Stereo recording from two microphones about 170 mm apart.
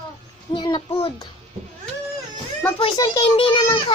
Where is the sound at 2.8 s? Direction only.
20° left (ahead or behind).